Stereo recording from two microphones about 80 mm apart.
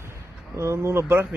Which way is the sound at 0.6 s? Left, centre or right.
Right.